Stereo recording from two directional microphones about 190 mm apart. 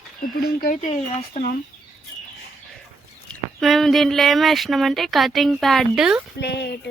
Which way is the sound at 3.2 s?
Centre (ahead or behind).